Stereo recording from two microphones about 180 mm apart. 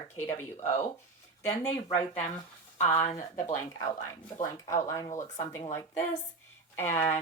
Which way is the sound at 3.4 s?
15° left (ahead or behind).